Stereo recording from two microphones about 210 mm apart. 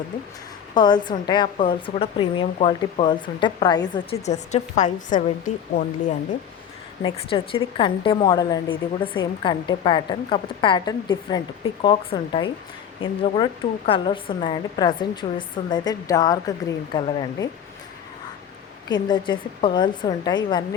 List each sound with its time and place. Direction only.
0.7 s a woman's voice: 20° left (ahead or behind); by 5.2 s 35° left (ahead or behind)
7.0 s a woman's voice: 25° left (ahead or behind)
18.9 s a woman's voice: 20° left (ahead or behind)